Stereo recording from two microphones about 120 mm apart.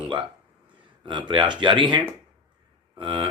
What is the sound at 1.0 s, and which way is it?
Speech, 40° right (ahead or behind).